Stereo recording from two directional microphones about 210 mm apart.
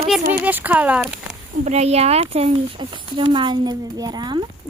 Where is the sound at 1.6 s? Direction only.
30° right (ahead or behind).